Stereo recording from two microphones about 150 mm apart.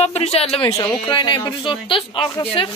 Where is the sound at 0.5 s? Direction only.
20° left (ahead or behind).